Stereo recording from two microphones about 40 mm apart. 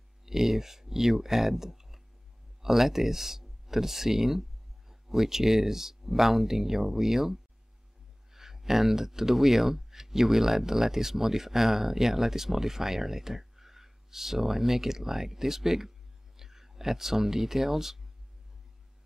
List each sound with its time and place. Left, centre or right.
0.2 s speech: centre